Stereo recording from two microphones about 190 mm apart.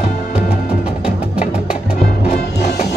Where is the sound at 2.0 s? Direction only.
50° left (ahead or behind).